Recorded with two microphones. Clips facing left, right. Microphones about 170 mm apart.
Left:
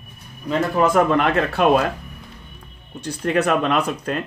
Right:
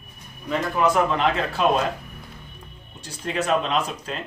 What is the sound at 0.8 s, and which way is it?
Speech, 55° left (ahead or behind).